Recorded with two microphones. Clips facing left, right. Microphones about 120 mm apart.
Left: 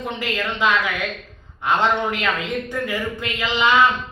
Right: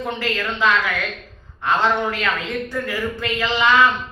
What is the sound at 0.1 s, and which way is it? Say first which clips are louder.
A man's voice: right 1 dB; 15° left (ahead or behind).